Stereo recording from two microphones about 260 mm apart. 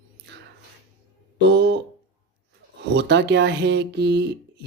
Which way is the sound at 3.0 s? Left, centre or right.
Right.